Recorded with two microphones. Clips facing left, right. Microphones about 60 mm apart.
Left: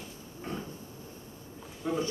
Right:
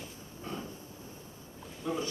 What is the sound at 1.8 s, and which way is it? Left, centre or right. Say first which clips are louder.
Speech: left 3 dB; left.